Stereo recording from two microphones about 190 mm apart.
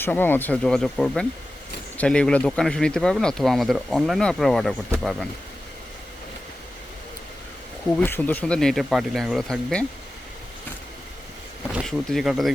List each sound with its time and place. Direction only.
0.0 s speech: 10° left (ahead or behind)
7.9 s speech: 10° left (ahead or behind)
11.7 s speech: centre (ahead or behind)